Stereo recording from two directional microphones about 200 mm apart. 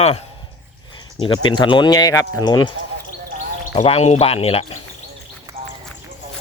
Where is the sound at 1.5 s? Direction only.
25° left (ahead or behind).